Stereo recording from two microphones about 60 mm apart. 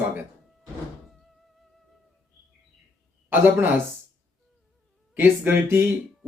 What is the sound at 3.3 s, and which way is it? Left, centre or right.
Speech, right.